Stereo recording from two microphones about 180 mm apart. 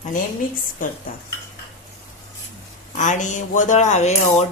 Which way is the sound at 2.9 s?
45° left (ahead or behind).